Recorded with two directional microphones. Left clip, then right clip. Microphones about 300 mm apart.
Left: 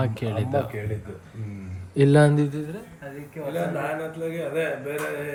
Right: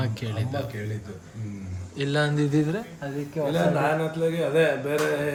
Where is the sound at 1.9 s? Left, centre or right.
Left.